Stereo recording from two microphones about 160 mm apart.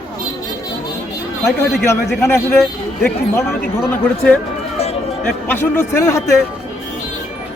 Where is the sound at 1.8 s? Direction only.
15° left (ahead or behind).